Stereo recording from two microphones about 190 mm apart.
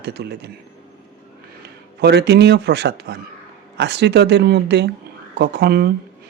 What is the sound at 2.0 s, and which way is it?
Speech, 60° right (ahead or behind).